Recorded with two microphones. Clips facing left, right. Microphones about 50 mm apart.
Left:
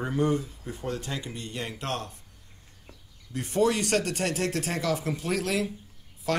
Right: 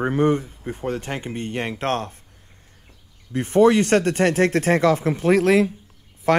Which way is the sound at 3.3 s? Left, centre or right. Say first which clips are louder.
Right 9 dB; right.